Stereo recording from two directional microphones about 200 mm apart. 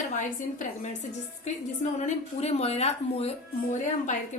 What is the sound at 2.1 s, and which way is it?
A woman's voice, 30° left (ahead or behind).